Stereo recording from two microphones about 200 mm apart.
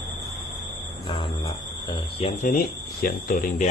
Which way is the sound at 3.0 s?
45° left (ahead or behind).